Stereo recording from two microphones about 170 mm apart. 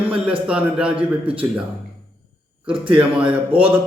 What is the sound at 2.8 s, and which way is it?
Speech, 5° right (ahead or behind).